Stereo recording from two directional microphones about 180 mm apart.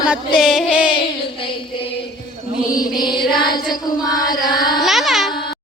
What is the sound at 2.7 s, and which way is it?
Music, 20° left (ahead or behind).